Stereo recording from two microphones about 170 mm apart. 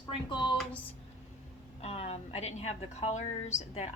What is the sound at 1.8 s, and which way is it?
A woman's voice, 35° left (ahead or behind).